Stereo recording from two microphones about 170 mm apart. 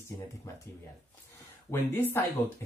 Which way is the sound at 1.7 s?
10° left (ahead or behind).